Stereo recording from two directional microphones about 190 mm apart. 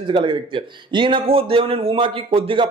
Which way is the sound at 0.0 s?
25° right (ahead or behind).